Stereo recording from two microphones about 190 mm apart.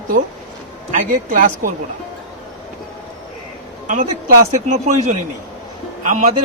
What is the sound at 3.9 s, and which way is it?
A man's voice, 45° right (ahead or behind).